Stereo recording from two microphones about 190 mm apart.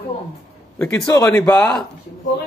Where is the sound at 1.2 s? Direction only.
10° left (ahead or behind).